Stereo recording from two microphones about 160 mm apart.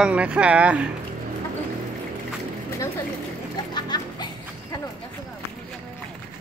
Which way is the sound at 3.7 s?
25° left (ahead or behind).